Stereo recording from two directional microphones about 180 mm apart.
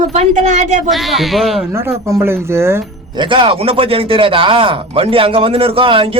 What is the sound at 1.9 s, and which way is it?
Speech, 15° right (ahead or behind).